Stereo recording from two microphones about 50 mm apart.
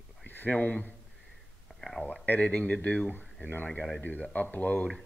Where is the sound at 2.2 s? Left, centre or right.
Left.